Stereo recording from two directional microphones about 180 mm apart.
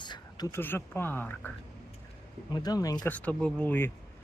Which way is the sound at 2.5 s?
20° left (ahead or behind).